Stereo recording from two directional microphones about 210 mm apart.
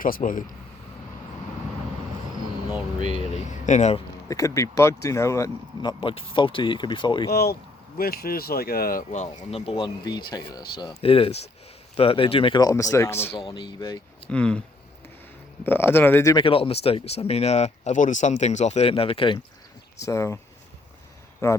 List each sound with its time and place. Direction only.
0.0 s speech: 40° left (ahead or behind)
3.7 s speech: 35° left (ahead or behind)
4.3 s speech: 15° left (ahead or behind)
7.3 s speech: 50° left (ahead or behind)
9.5 s speech: 25° left (ahead or behind)
14.3 s speech: 5° left (ahead or behind)
15.6 s speech: 10° left (ahead or behind)
20.0 s speech: 15° left (ahead or behind)
21.4 s speech: 15° left (ahead or behind)